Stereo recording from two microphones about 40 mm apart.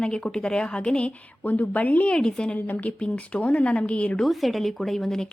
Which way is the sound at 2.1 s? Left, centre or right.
Centre.